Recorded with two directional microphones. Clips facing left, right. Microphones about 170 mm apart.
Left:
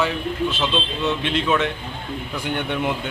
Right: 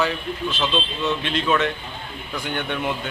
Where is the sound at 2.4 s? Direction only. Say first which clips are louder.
Left 2 dB; 10° left (ahead or behind).